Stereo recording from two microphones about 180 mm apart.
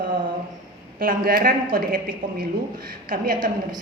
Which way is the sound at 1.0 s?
55° right (ahead or behind).